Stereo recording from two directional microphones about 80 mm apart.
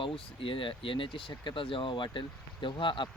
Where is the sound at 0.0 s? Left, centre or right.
Left.